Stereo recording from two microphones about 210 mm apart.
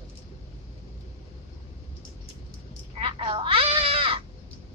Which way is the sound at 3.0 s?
25° right (ahead or behind).